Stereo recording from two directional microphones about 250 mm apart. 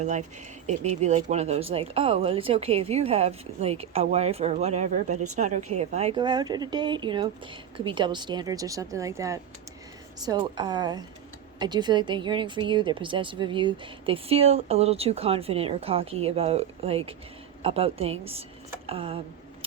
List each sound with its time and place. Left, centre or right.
0.0 s a woman's voice: right